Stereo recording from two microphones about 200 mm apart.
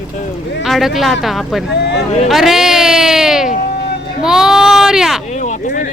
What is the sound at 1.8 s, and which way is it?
Speech, 55° left (ahead or behind).